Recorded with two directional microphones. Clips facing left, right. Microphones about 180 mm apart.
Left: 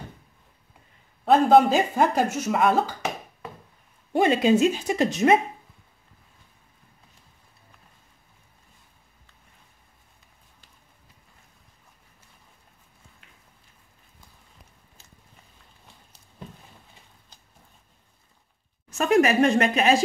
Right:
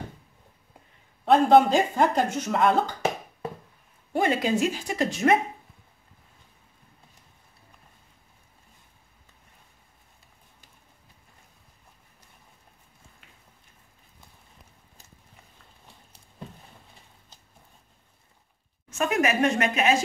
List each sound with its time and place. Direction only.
1.2 s speech: centre (ahead or behind)
4.1 s speech: 20° left (ahead or behind)
18.9 s speech: 35° left (ahead or behind)